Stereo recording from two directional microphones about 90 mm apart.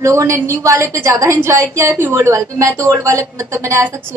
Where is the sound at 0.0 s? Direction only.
35° right (ahead or behind).